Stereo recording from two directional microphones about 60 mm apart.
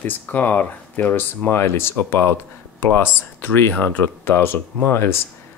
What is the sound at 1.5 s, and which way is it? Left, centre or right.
Speech, left.